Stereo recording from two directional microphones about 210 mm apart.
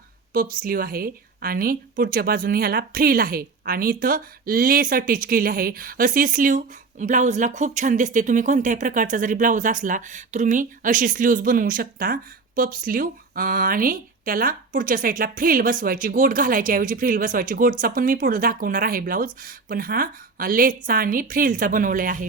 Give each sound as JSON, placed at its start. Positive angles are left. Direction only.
{"t": 0.3, "sound": "a woman's voice", "side_deg": -40}